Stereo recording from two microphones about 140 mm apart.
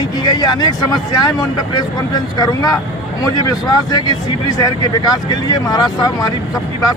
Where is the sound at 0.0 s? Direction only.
30° left (ahead or behind).